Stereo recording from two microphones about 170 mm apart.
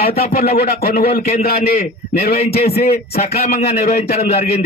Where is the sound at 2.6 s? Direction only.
40° left (ahead or behind).